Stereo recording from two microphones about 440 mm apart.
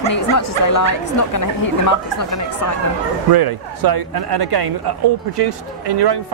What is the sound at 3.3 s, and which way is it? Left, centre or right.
Speech, right.